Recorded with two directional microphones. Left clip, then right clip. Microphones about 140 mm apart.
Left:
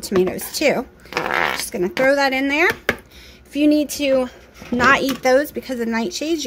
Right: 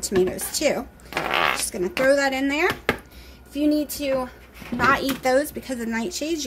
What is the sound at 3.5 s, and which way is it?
Speech, 85° left.